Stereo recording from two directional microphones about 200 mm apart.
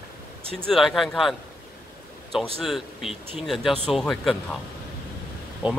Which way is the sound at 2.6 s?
Centre (ahead or behind).